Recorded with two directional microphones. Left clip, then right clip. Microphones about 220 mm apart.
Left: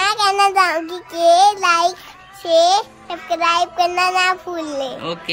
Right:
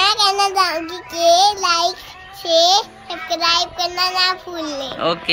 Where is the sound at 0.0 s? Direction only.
5° left (ahead or behind).